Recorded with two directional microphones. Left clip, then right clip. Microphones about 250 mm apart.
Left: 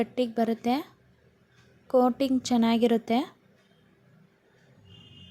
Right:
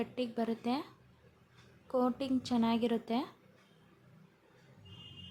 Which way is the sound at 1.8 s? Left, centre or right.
Left.